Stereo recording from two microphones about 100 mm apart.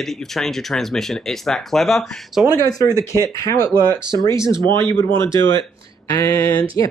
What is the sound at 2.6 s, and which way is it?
Speech, 35° left (ahead or behind).